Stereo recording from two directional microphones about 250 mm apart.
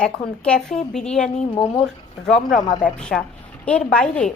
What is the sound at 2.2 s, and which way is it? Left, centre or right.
A woman's voice, centre.